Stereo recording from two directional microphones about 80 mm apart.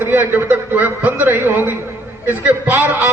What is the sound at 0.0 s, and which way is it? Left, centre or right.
A man's voice, right.